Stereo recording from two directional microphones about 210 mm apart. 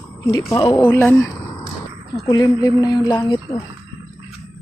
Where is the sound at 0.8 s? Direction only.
10° left (ahead or behind).